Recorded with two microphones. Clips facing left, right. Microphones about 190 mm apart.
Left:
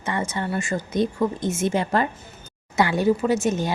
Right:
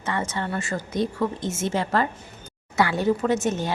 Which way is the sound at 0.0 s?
15° left (ahead or behind).